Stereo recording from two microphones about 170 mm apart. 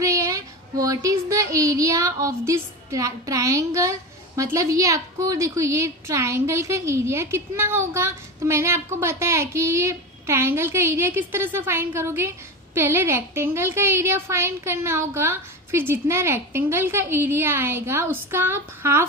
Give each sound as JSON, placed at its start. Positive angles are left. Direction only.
{"t": 0.0, "sound": "child singing", "side_deg": -20}
{"t": 4.4, "sound": "a woman's voice", "side_deg": -20}